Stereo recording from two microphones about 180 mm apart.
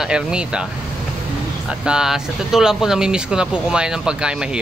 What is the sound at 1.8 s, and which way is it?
Speech, 5° right (ahead or behind).